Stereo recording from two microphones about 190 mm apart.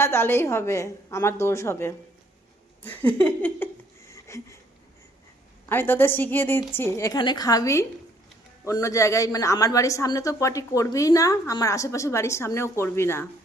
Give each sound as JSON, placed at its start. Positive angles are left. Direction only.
{"t": 0.0, "sound": "a woman's voice", "side_deg": 10}
{"t": 2.8, "sound": "a sound", "side_deg": 10}
{"t": 5.6, "sound": "a woman's voice", "side_deg": 10}